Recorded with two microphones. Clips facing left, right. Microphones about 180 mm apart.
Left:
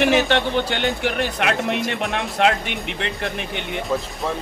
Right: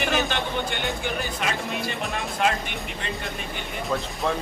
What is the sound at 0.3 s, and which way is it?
Speech, 70° left (ahead or behind).